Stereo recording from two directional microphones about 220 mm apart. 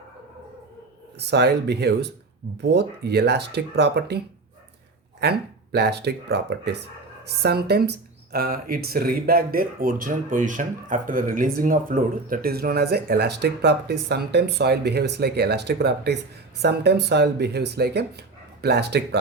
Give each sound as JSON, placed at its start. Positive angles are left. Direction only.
{"t": 1.2, "sound": "speech", "side_deg": -50}
{"t": 5.2, "sound": "speech", "side_deg": -50}